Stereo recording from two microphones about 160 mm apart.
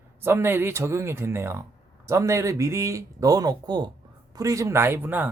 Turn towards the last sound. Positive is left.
turn(degrees=-10)  # may be behind; listen again after turning